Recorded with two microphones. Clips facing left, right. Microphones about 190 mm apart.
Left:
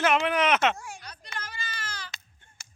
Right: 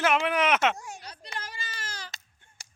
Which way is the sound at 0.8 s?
20° right (ahead or behind).